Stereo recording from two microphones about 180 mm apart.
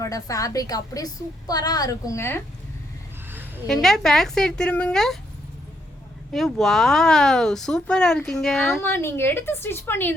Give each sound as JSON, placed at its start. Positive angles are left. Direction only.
{"t": 0.0, "sound": "a woman's voice", "side_deg": 20}
{"t": 3.7, "sound": "speech", "side_deg": 0}
{"t": 6.3, "sound": "speech", "side_deg": 0}
{"t": 8.8, "sound": "a woman's voice", "side_deg": 15}